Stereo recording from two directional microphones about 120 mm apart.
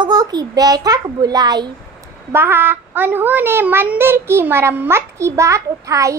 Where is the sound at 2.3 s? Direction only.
20° right (ahead or behind).